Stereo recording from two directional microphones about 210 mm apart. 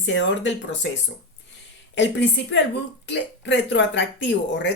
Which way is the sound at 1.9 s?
60° left (ahead or behind).